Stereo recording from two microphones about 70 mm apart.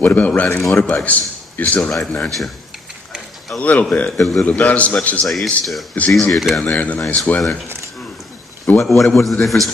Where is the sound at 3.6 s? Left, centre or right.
Left.